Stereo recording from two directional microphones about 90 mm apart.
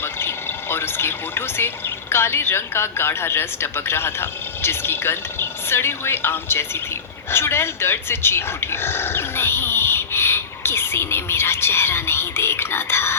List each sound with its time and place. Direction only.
0.0 s speech: 25° left (ahead or behind)